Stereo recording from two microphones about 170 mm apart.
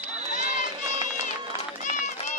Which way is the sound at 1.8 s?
45° left (ahead or behind).